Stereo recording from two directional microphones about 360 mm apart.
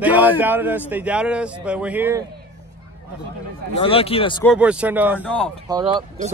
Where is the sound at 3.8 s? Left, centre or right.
Centre.